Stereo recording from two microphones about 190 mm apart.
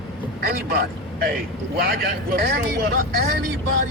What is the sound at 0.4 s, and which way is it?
A man's voice, 50° right (ahead or behind).